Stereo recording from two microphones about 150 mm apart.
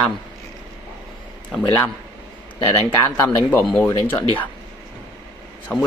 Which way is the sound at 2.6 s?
15° left (ahead or behind).